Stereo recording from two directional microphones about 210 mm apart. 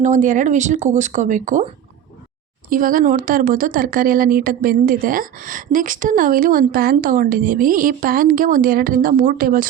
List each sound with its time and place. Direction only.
0.0 s speech: 35° right (ahead or behind)
2.6 s speech: 40° right (ahead or behind)